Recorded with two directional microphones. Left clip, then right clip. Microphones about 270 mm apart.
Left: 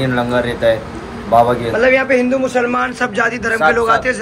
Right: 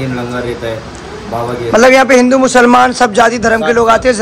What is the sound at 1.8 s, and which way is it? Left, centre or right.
A man's voice, right.